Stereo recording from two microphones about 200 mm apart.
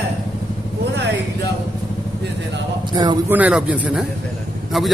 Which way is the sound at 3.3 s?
5° right (ahead or behind).